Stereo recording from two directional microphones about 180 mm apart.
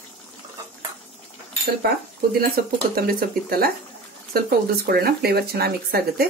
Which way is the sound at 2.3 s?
55° right (ahead or behind).